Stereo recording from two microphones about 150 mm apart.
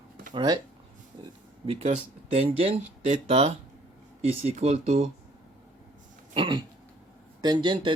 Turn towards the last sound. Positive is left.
turn(degrees=-30)  # may be behind; listen again after turning